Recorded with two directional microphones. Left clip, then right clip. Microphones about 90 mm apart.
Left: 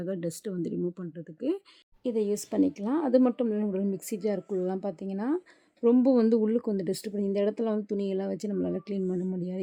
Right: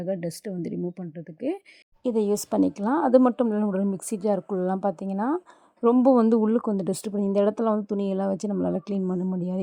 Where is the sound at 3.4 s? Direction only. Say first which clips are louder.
Right 4 dB; 45° right (ahead or behind).